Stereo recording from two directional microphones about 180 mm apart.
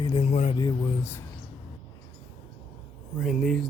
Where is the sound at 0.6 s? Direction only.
20° left (ahead or behind).